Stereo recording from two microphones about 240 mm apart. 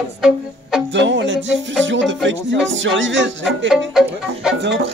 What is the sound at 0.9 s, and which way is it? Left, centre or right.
Speech, right.